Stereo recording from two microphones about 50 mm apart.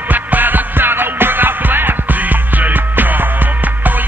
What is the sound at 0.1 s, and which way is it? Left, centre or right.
Music, right.